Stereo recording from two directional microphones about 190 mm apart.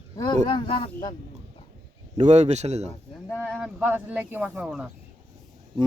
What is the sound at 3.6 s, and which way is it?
Speech, 10° right (ahead or behind).